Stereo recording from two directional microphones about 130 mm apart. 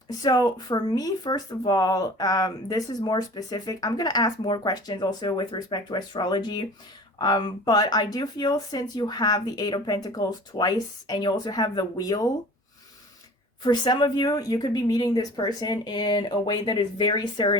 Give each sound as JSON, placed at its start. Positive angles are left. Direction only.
{"t": 0.1, "sound": "speech", "side_deg": 30}
{"t": 13.6, "sound": "speech", "side_deg": 35}